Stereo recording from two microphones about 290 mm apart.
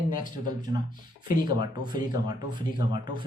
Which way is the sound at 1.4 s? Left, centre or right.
Centre.